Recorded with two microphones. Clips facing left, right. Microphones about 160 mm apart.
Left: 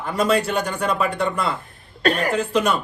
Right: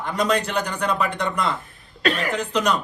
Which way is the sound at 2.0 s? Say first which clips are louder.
Left 3 dB; 40° left (ahead or behind).